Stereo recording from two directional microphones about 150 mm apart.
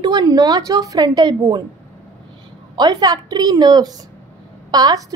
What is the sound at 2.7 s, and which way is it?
A woman's voice, 25° right (ahead or behind).